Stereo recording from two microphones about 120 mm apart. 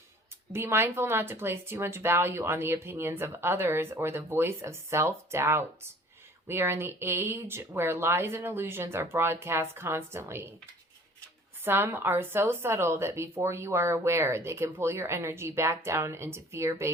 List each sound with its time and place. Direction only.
0.5 s speech: 20° right (ahead or behind)
11.6 s speech: 20° right (ahead or behind)